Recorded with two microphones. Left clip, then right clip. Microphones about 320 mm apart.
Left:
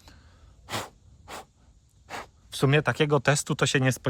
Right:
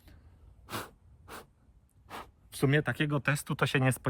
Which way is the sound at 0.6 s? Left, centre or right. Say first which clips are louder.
Left 6 dB; left.